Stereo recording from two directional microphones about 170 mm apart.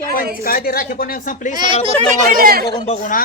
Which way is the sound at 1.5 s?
25° right (ahead or behind).